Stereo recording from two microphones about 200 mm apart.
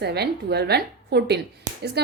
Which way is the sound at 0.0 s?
55° right (ahead or behind).